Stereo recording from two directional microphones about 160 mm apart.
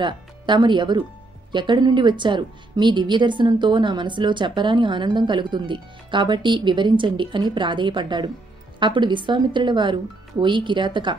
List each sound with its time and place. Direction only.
0.0 s a woman's voice: 30° right (ahead or behind)